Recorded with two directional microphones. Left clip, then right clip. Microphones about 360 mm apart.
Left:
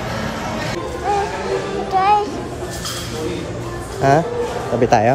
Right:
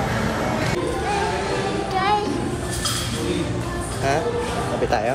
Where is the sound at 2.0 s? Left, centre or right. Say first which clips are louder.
Left 7 dB; left.